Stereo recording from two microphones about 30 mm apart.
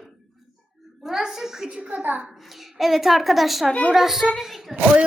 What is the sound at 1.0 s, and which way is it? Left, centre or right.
Speech, centre.